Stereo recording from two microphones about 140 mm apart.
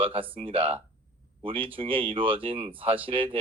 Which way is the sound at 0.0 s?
40° right (ahead or behind).